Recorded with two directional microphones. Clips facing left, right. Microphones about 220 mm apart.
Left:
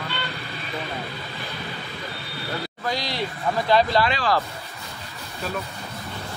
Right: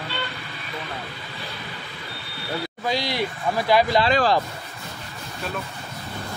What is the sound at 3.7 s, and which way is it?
Speech, 10° right (ahead or behind).